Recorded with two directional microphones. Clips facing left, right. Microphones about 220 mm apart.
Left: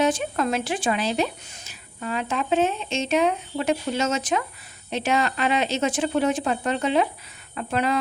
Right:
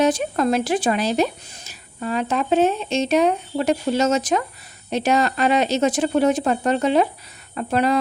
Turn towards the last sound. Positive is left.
turn(degrees=-40)  # may be behind; listen again after turning